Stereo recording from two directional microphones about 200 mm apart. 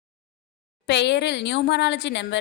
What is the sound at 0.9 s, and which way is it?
A woman's voice, 60° left (ahead or behind).